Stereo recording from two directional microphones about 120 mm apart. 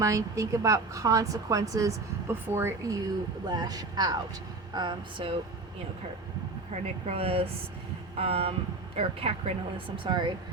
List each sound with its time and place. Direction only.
0.0 s speech: 25° right (ahead or behind)
3.4 s speech: 35° right (ahead or behind)
6.7 s speech: 55° right (ahead or behind); by 10.3 s 40° right (ahead or behind)